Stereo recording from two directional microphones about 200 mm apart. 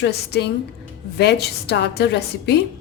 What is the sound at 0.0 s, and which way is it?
A woman's voice, 55° left (ahead or behind).